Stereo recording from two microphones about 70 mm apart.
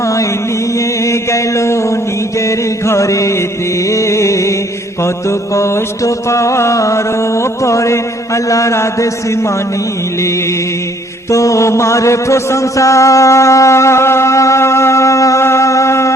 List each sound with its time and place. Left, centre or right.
0.0 s chant: left
1.0 s a sound: left
2.4 s chant: left
3.8 s music: left
11.3 s mantra: left